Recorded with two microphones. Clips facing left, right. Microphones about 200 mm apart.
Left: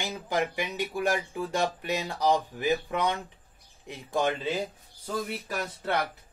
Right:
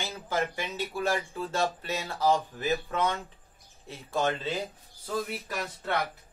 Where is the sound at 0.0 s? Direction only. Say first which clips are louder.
Left 2 dB; 15° left (ahead or behind).